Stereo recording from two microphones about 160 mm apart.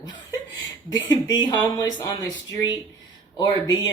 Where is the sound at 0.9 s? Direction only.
25° left (ahead or behind).